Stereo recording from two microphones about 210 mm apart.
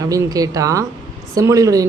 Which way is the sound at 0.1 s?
15° right (ahead or behind).